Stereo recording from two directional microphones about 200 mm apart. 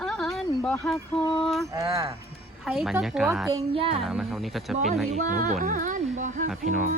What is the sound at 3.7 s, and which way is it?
Speech, 25° right (ahead or behind).